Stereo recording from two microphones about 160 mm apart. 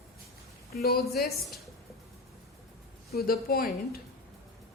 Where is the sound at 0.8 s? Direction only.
70° left (ahead or behind).